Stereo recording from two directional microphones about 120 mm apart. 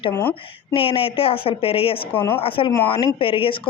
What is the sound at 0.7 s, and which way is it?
Speech, 45° left (ahead or behind).